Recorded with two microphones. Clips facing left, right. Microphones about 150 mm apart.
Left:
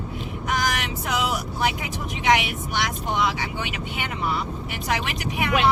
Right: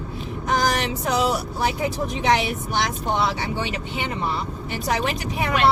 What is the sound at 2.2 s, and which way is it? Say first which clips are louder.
Speech: even; 35° right (ahead or behind).